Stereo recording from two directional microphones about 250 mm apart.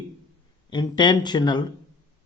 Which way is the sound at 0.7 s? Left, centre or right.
Centre.